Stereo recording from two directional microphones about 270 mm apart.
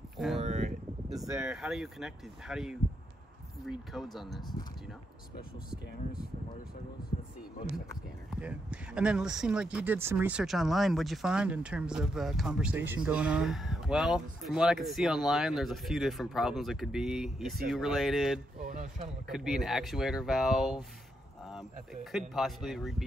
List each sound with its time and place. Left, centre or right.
0.4 s a sound: right
1.2 s speech: centre
8.3 s speech: centre
18.6 s a sound: right
19.2 s speech: centre
22.3 s speech: centre